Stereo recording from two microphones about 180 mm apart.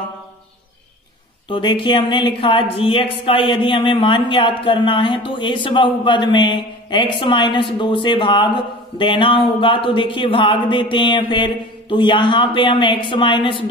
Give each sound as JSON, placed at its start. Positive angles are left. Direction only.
{"t": 1.5, "sound": "a woman's voice", "side_deg": 25}